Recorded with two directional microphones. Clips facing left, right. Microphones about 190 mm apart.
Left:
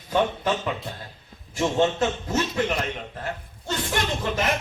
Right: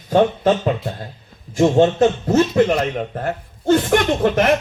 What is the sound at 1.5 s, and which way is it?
A man's voice, 40° right (ahead or behind).